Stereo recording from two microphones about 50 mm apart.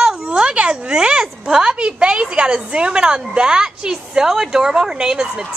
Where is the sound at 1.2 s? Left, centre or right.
Centre.